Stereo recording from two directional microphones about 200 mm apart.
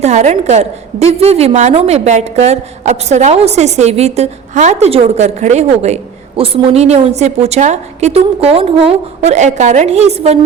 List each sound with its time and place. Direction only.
0.0 s a woman's voice: 35° right (ahead or behind)